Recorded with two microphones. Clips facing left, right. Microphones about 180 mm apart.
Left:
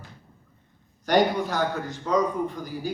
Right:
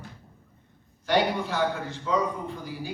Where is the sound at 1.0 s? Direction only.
45° left (ahead or behind).